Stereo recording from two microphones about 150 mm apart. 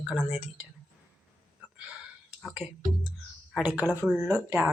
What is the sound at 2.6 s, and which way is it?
Speech, 45° left (ahead or behind).